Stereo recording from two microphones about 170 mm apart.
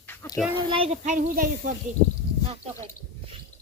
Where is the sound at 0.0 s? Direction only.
10° left (ahead or behind).